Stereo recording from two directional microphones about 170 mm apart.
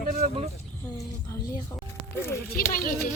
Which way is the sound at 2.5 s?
55° left (ahead or behind).